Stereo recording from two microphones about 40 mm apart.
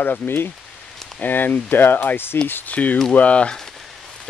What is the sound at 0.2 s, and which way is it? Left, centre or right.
Speech, left.